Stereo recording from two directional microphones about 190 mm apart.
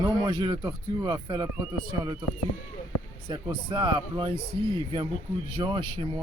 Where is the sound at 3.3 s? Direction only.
25° right (ahead or behind).